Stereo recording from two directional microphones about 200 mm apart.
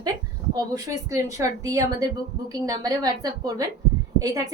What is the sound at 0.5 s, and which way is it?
A woman's voice, 15° right (ahead or behind).